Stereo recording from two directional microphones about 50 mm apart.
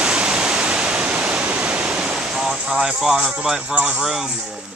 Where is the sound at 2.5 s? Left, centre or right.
Right.